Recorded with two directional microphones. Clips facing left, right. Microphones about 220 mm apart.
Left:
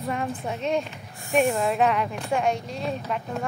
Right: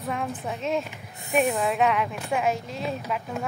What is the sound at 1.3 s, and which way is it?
Speech, centre (ahead or behind).